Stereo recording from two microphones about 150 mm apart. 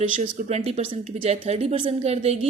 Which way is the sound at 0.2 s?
50° right (ahead or behind).